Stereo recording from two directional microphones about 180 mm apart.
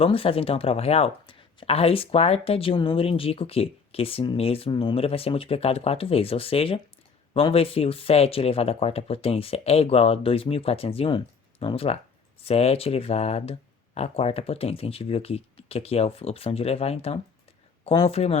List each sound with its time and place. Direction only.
0.0 s speech: 30° left (ahead or behind)